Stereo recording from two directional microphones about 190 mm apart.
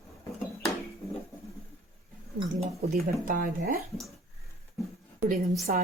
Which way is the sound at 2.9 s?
50° right (ahead or behind).